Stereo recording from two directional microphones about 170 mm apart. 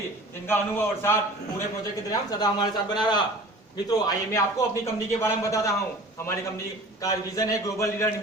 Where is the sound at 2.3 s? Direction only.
25° left (ahead or behind).